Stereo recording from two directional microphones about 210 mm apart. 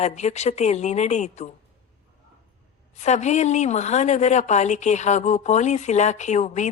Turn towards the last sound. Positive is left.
turn(degrees=35)  # may be behind; listen again after turning